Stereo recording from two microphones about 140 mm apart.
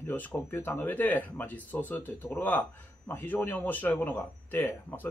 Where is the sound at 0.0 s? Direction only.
15° left (ahead or behind).